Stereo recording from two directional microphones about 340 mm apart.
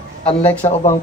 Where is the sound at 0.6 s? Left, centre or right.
Centre.